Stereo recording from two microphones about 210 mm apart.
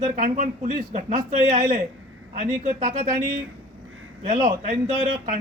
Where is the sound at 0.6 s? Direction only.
30° right (ahead or behind).